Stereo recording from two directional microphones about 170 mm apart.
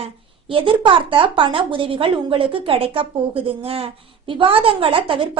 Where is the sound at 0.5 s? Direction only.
30° right (ahead or behind).